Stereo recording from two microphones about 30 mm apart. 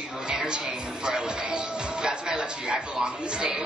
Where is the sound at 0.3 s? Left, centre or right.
Right.